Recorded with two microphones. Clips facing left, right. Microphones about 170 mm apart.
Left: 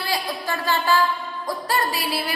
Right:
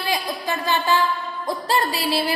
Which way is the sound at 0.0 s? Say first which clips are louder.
Right 1 dB; 20° right (ahead or behind).